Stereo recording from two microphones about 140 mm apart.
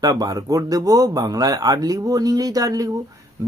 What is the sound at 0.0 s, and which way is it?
Speech, 25° right (ahead or behind).